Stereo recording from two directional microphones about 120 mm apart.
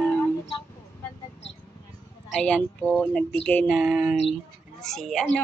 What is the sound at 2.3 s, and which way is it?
Speech, 10° left (ahead or behind).